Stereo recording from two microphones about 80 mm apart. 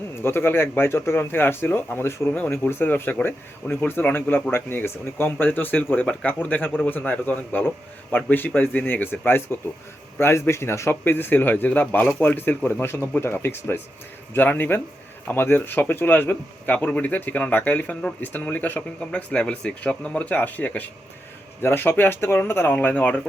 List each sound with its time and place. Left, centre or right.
0.2 s speech: left